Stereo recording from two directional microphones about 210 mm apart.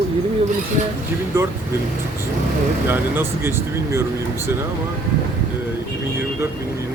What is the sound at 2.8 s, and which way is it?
Speech, 10° right (ahead or behind).